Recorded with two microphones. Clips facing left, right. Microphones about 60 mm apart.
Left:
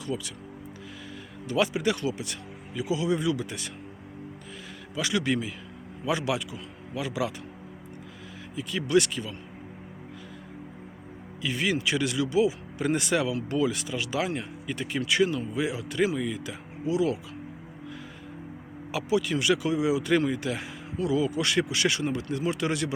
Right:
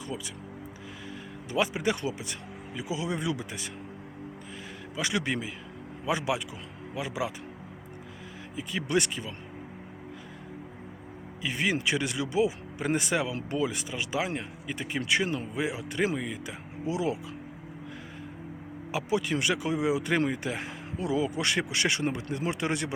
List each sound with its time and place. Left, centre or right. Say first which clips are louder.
0.0 s speech: left 4 dB; right
1.5 s speech: left 2 dB; right
4.9 s speech: left 3 dB; right
8.5 s speech: left 4 dB; right
11.3 s speech: left 1 dB; right
18.9 s speech: left 2 dB; right